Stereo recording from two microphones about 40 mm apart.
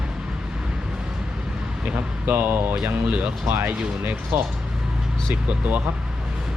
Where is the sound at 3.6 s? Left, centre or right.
Right.